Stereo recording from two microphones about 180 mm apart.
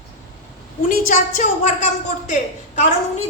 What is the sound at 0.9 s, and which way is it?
A woman's voice, 45° left (ahead or behind).